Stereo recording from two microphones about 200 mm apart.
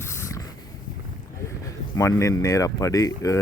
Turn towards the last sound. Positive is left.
turn(degrees=15)  # may be behind; listen again after turning